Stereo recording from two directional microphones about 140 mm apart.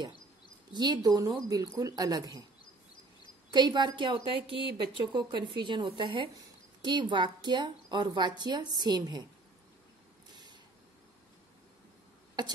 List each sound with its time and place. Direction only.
0.7 s speech: 30° right (ahead or behind)
3.5 s a woman's voice: 30° right (ahead or behind)
10.3 s a sound: 30° right (ahead or behind)
12.4 s speech: 30° right (ahead or behind)